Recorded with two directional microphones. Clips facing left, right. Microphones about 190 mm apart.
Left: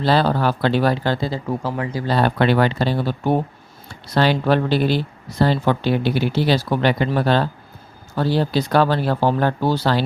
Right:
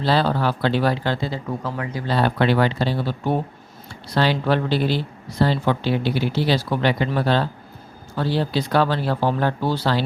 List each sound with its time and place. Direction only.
0.0 s speech: 50° left (ahead or behind)